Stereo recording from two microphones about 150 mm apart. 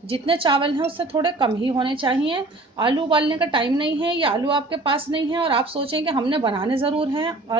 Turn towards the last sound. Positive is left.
turn(degrees=-35)  # may be behind; listen again after turning